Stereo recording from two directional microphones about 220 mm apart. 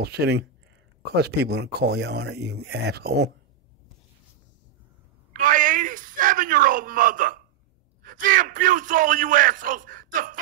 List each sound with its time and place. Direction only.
0.0 s speech: 50° right (ahead or behind)
5.3 s a sound: 40° right (ahead or behind)
8.0 s a man's voice: 40° right (ahead or behind)